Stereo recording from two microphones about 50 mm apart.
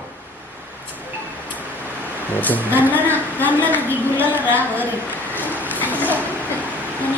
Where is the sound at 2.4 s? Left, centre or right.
Left.